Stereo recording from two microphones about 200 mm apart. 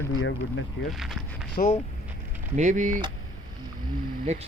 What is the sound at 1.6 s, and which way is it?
Speech, 35° left (ahead or behind).